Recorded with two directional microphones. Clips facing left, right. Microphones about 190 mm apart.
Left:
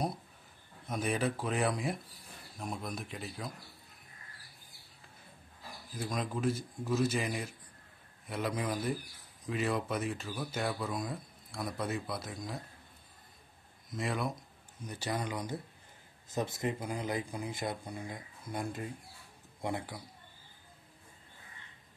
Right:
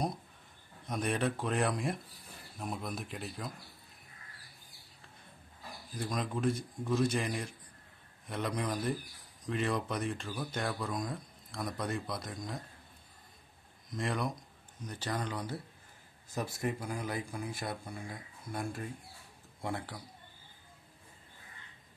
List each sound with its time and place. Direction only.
0.8 s speech: centre (ahead or behind)
5.9 s speech: centre (ahead or behind)
13.9 s speech: centre (ahead or behind); by 20.0 s 15° left (ahead or behind)